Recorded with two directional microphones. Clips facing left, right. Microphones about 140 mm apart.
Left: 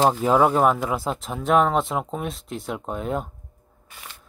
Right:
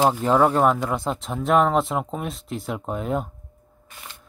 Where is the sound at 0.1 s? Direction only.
5° left (ahead or behind).